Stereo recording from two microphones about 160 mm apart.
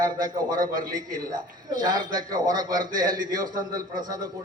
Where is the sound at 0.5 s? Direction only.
60° right (ahead or behind).